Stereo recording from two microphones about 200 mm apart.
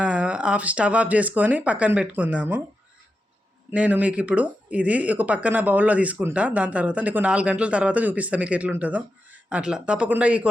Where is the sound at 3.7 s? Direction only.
5° right (ahead or behind).